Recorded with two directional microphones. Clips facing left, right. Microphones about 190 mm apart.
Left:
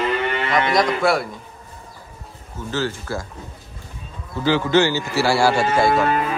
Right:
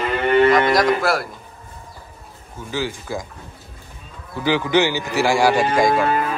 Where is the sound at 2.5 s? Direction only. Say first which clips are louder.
Left 1 dB; 10° right (ahead or behind).